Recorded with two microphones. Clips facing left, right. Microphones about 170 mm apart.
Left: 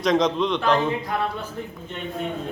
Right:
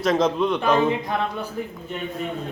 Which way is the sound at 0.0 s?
5° right (ahead or behind).